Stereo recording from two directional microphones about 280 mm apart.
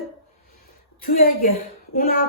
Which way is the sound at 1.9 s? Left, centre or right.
Left.